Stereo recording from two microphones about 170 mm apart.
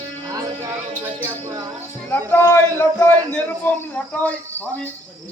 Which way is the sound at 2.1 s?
15° left (ahead or behind).